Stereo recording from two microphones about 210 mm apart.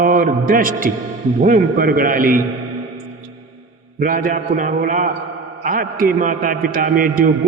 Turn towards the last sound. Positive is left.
turn(degrees=-40)  # may be behind; listen again after turning